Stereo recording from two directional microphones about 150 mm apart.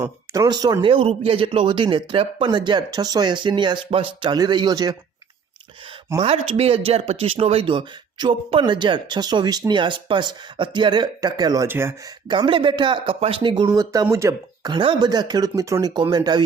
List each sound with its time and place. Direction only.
0.0 s speech: 25° right (ahead or behind)
6.1 s speech: 40° right (ahead or behind); by 12.1 s 15° right (ahead or behind)
12.3 s speech: 35° right (ahead or behind)